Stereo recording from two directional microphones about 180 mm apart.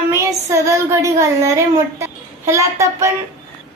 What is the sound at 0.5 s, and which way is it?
A woman's voice, 15° right (ahead or behind).